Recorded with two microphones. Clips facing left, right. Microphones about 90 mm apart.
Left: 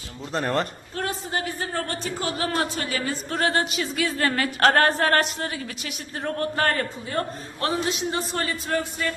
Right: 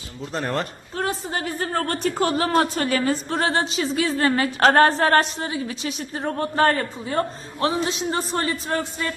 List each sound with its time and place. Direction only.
0.3 s a man's voice: centre (ahead or behind)
0.9 s a woman's voice: 35° right (ahead or behind)
3.2 s speech: 30° right (ahead or behind)